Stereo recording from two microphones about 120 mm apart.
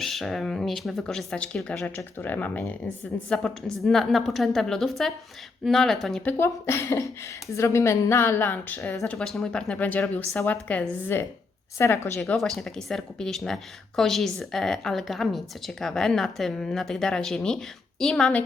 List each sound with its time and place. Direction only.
0.0 s a woman's voice: centre (ahead or behind)
2.1 s a woman's voice: 15° left (ahead or behind)
6.2 s a woman's voice: 20° left (ahead or behind)
9.1 s a woman's voice: centre (ahead or behind); by 12.2 s 25° left (ahead or behind)
12.2 s a woman's voice: centre (ahead or behind)